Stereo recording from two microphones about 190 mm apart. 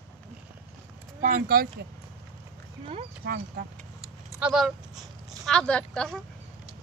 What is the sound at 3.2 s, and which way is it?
Speech, 50° right (ahead or behind).